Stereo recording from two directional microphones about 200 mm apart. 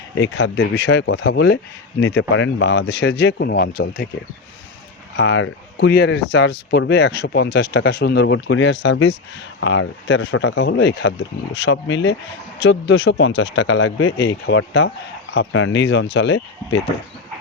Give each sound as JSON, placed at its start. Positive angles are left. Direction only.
{"t": 0.2, "sound": "speech", "side_deg": 70}
{"t": 5.1, "sound": "speech", "side_deg": 70}
{"t": 9.6, "sound": "speech", "side_deg": 70}